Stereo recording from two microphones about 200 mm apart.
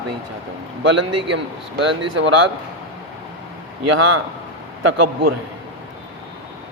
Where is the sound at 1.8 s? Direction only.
65° right (ahead or behind).